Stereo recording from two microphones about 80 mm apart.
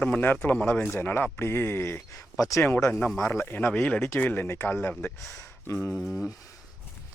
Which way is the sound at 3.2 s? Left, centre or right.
Left.